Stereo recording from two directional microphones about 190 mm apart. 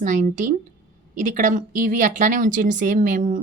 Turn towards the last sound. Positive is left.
turn(degrees=-40)  # may be behind; listen again after turning